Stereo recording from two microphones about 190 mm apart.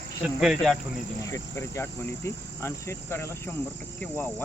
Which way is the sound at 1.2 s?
15° left (ahead or behind).